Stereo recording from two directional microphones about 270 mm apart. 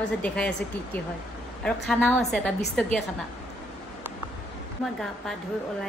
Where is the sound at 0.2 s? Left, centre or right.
Centre.